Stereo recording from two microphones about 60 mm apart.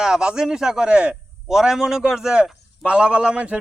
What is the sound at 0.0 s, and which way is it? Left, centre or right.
A man's voice, centre.